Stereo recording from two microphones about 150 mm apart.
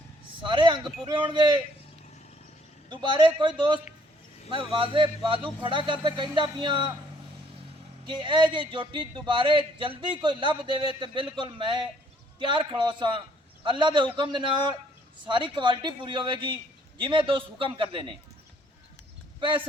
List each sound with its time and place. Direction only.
0.4 s a sound: 35° right (ahead or behind)
1.0 s speech: 30° right (ahead or behind)
2.9 s speech: 30° right (ahead or behind)
8.0 s speech: 30° right (ahead or behind)
19.4 s speech: 35° right (ahead or behind)